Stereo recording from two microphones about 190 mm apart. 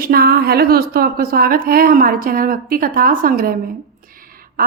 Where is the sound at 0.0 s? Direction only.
55° right (ahead or behind).